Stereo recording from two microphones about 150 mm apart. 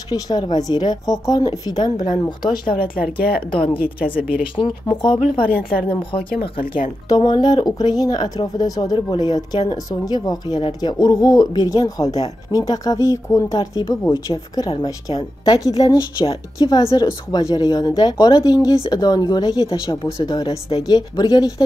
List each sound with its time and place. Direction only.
0.1 s a woman's voice: 25° left (ahead or behind)
2.8 s speech: 75° left (ahead or behind)
3.5 s speech: 35° left (ahead or behind)
5.5 s speech: 70° left (ahead or behind)
7.1 s a woman's voice: 25° left (ahead or behind)